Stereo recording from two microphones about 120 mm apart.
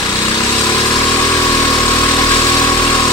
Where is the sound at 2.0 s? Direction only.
25° left (ahead or behind).